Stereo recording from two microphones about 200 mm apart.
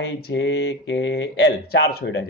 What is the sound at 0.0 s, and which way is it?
Speech, 60° left (ahead or behind).